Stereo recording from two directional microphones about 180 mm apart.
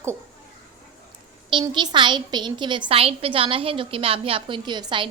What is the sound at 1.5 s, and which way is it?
A woman's voice, 25° right (ahead or behind).